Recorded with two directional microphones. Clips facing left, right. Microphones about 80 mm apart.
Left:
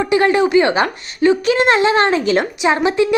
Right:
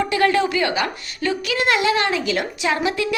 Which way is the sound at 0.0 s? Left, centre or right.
Left.